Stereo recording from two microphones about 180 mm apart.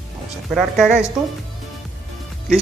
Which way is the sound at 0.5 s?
Centre (ahead or behind).